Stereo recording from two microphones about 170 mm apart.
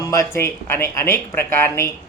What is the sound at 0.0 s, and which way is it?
Speech, 15° left (ahead or behind).